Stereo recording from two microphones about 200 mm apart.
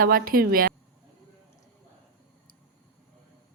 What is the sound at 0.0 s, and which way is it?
Speech, 45° right (ahead or behind).